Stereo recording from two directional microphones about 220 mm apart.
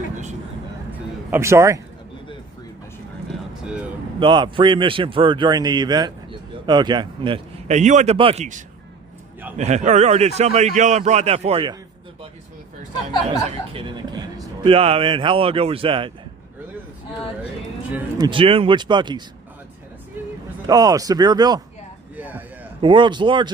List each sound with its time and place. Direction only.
1.3 s speech: 10° right (ahead or behind)
4.2 s a man's voice: 20° right (ahead or behind)
13.3 s a man's voice: 20° right (ahead or behind)
18.2 s speech: 20° right (ahead or behind)
20.7 s speech: 15° right (ahead or behind)
22.1 s a sound: 10° right (ahead or behind)
22.8 s speech: 20° right (ahead or behind)